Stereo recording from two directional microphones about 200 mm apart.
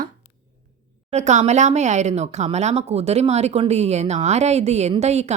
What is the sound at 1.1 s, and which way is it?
Speech, 35° right (ahead or behind).